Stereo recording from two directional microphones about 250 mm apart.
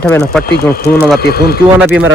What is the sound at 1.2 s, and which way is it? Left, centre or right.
Speech, left.